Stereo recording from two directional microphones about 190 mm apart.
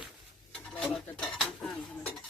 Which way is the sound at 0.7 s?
5° left (ahead or behind).